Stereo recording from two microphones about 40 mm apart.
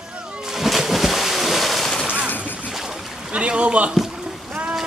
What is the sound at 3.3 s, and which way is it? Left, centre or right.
Speech, right.